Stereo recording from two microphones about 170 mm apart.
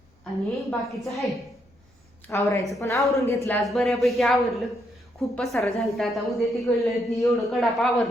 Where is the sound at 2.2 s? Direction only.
15° left (ahead or behind).